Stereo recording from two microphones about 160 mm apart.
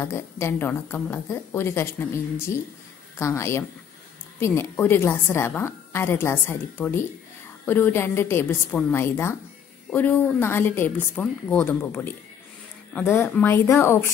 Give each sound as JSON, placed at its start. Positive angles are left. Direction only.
{"t": 0.0, "sound": "a woman's voice", "side_deg": 15}
{"t": 3.2, "sound": "a woman's voice", "side_deg": 15}